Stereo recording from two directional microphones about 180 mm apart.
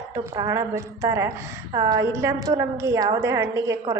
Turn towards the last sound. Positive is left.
turn(degrees=-20)  # may be behind; listen again after turning